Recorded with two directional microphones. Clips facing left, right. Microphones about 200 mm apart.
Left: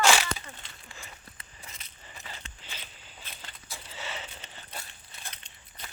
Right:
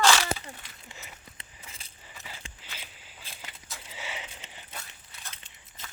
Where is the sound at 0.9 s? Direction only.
20° right (ahead or behind).